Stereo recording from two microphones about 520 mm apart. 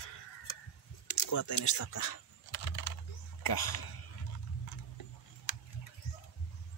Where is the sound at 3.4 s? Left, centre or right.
Left.